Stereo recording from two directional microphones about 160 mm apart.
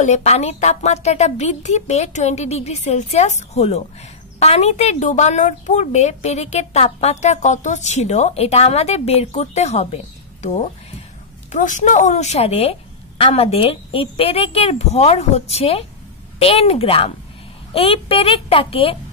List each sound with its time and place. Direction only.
0.0 s a woman's voice: 45° left (ahead or behind)